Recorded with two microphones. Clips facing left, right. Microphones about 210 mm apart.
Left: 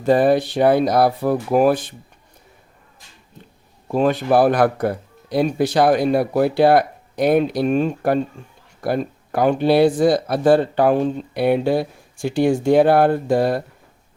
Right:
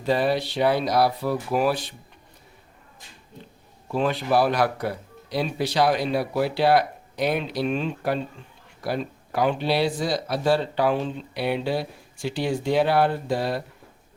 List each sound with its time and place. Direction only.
0.0 s speech: 50° left (ahead or behind)
3.8 s speech: 45° left (ahead or behind)